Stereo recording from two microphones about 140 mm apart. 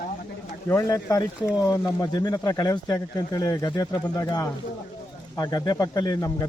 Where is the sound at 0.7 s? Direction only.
25° left (ahead or behind).